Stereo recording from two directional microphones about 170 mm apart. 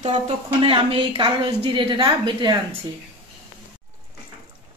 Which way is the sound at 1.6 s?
30° right (ahead or behind).